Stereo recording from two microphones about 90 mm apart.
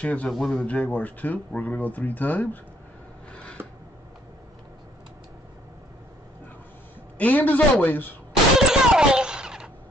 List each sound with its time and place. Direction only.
0.0 s a man's voice: 15° left (ahead or behind)
0.3 s a man's voice: centre (ahead or behind)
0.6 s speech: 15° left (ahead or behind)
3.6 s a sound: 25° right (ahead or behind)
7.2 s speech: 20° left (ahead or behind)
8.3 s gunshot: 5° right (ahead or behind)